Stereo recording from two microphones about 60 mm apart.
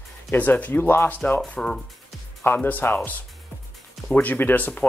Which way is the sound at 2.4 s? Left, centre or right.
Left.